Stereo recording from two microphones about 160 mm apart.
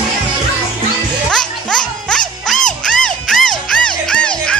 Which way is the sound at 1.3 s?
5° left (ahead or behind).